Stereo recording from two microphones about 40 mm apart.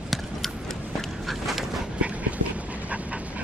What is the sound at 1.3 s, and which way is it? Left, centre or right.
Dog, centre.